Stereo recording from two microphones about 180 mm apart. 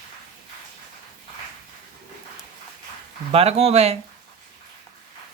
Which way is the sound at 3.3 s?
35° right (ahead or behind).